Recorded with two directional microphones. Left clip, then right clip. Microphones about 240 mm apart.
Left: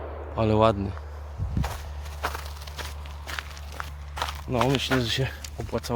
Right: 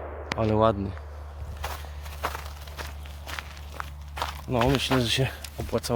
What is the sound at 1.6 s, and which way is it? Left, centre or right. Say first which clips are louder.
Walk: right 3 dB; centre.